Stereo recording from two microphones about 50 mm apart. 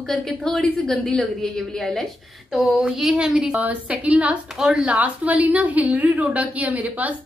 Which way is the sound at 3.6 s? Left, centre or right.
Right.